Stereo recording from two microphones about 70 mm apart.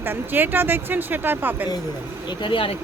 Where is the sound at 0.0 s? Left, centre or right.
Right.